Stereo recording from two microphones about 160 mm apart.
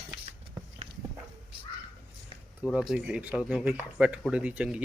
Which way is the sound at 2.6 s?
5° right (ahead or behind).